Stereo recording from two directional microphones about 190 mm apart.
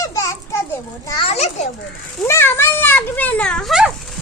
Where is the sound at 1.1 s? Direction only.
30° left (ahead or behind).